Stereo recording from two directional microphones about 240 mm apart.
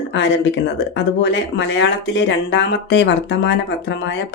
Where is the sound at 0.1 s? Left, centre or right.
Left.